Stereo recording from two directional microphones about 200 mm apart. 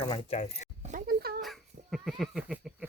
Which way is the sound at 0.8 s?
40° right (ahead or behind).